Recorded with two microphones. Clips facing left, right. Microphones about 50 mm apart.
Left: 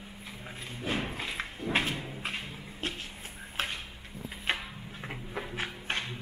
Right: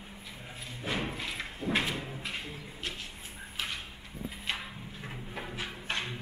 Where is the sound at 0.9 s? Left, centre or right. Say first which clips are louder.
Left 1 dB; left.